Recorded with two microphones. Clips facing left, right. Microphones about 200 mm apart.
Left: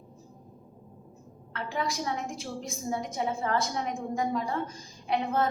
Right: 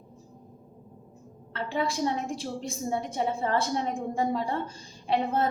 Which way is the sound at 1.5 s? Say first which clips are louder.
Right 3 dB; 30° right (ahead or behind).